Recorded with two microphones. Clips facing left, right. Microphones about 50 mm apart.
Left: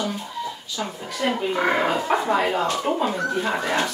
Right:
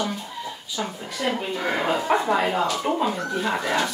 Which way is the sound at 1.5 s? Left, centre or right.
Left.